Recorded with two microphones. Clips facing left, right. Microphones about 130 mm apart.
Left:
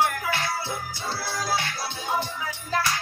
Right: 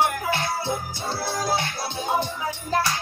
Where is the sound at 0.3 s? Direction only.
20° right (ahead or behind).